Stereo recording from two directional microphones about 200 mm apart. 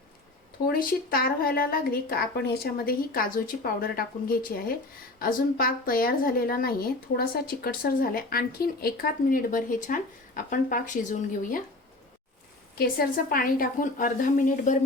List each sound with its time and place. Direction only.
0.7 s a woman's voice: 45° left (ahead or behind)
12.7 s a woman's voice: 45° left (ahead or behind)